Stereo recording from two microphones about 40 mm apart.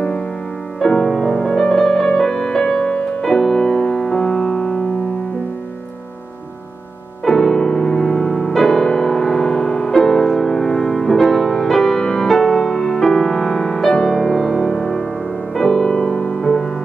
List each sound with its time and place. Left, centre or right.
0.7 s music: centre
3.2 s music: centre
7.2 s music: centre